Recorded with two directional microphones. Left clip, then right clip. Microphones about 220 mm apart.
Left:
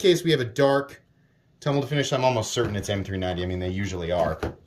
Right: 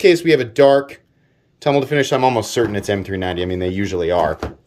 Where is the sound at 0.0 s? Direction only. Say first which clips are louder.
Right 8 dB; 5° right (ahead or behind).